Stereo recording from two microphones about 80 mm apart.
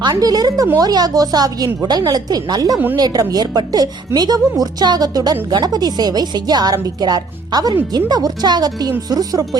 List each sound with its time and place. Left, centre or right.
0.1 s a woman's voice: right